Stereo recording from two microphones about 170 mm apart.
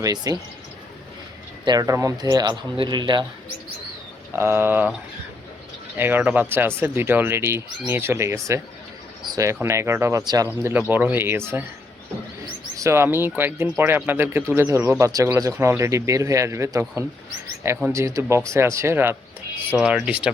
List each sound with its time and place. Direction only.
0.0 s a man's voice: 20° right (ahead or behind)
1.6 s a man's voice: 20° right (ahead or behind)
4.4 s speech: 15° right (ahead or behind)
6.0 s speech: 10° right (ahead or behind)
12.7 s speech: 15° right (ahead or behind)
19.7 s speech: 5° right (ahead or behind)